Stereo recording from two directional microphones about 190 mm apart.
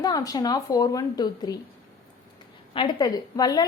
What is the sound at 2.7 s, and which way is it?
Speech, 20° left (ahead or behind).